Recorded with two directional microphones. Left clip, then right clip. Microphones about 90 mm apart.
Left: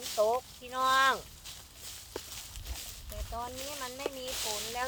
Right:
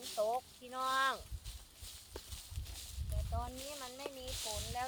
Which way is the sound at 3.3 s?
25° right (ahead or behind).